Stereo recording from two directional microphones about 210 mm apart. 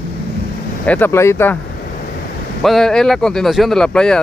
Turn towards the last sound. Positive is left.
turn(degrees=5)  # may be behind; listen again after turning